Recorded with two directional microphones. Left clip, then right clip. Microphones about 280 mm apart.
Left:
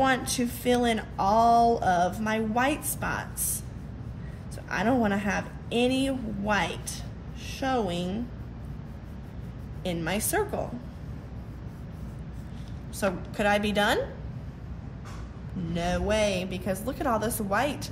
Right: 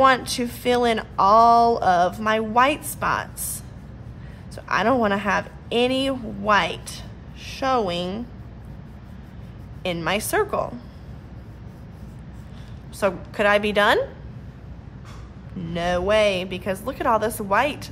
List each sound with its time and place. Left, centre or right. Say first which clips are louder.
0.0 s speech: right 8 dB; right
4.6 s speech: right 7 dB; right
9.8 s speech: right 6 dB; right
13.0 s speech: right 6 dB; right
15.7 s speech: right 7 dB; right